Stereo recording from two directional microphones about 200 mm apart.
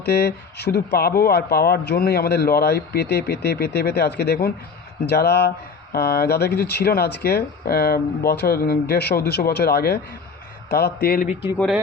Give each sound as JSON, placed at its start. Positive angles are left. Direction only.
{"t": 0.0, "sound": "speech", "side_deg": 55}